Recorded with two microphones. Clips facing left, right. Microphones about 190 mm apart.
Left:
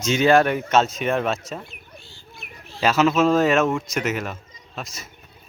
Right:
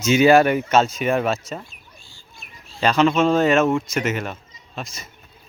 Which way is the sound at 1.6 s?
65° left (ahead or behind).